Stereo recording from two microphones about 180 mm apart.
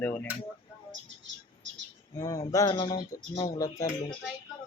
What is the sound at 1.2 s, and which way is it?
Chirp, 90° right.